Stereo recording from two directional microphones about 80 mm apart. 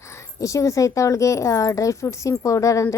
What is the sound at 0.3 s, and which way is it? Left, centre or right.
A woman's voice, left.